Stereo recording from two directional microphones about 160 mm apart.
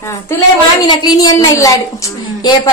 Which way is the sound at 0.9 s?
25° left (ahead or behind).